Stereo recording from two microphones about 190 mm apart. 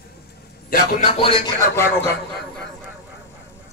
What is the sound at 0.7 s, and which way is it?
Speech, 50° left (ahead or behind).